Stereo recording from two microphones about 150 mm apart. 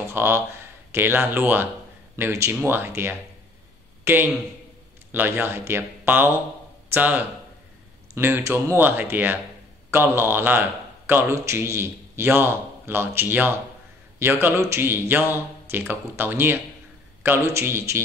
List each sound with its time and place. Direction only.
0.1 s a man's voice: 15° right (ahead or behind)